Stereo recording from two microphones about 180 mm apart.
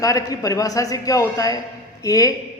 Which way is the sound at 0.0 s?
20° left (ahead or behind).